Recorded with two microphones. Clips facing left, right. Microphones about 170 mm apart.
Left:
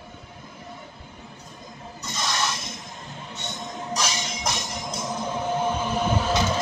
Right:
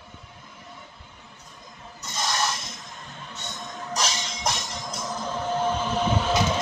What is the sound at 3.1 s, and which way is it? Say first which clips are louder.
Music: left 3 dB; 25° left (ahead or behind).